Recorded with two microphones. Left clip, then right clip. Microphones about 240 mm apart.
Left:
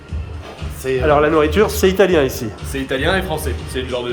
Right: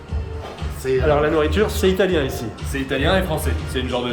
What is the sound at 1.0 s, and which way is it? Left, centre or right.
A man's voice, centre.